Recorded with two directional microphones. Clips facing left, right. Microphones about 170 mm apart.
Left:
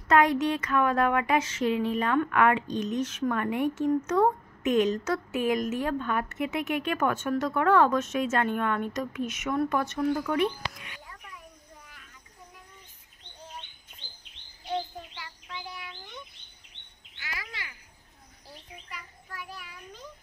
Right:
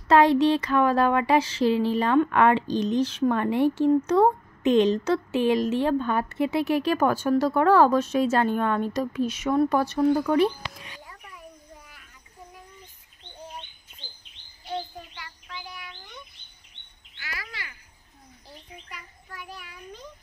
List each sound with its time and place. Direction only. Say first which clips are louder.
0.1 s speech: right 5 dB; 30° right (ahead or behind)
14.7 s bird vocalization: left 1 dB; 20° left (ahead or behind)
17.2 s bird: right 1 dB; 20° left (ahead or behind)
18.9 s child singing: even; centre (ahead or behind)